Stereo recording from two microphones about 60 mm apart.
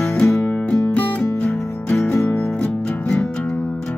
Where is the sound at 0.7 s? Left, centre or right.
Left.